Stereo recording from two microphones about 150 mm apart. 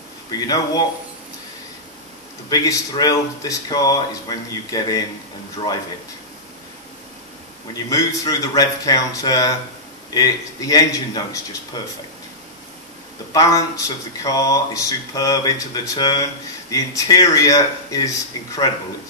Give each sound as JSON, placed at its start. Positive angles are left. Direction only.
{"t": 0.3, "sound": "speech", "side_deg": 25}
{"t": 2.5, "sound": "speech", "side_deg": 25}
{"t": 7.7, "sound": "speech", "side_deg": 25}
{"t": 13.3, "sound": "speech", "side_deg": 20}